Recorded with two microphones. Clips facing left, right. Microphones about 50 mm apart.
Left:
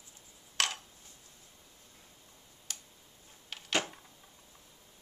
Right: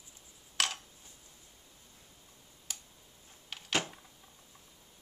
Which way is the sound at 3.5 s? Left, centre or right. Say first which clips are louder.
Left 1 dB; centre.